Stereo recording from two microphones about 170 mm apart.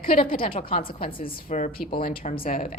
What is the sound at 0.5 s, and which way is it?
A woman's voice, 55° left (ahead or behind).